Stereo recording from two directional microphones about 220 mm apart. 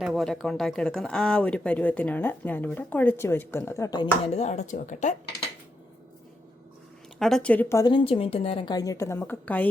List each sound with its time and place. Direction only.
0.0 s speech: centre (ahead or behind); by 4.4 s 20° left (ahead or behind)
4.4 s speech: 35° left (ahead or behind)
7.2 s speech: centre (ahead or behind)